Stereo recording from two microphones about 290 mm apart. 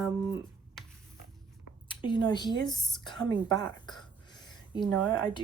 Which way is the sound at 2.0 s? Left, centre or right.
Centre.